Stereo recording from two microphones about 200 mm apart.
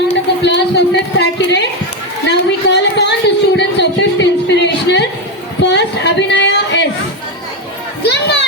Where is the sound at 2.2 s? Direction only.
60° left (ahead or behind).